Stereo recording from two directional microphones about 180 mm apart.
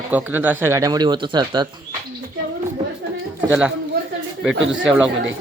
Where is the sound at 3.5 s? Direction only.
5° right (ahead or behind).